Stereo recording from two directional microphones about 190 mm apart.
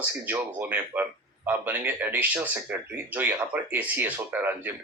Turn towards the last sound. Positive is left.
turn(degrees=-10)  # may be behind; listen again after turning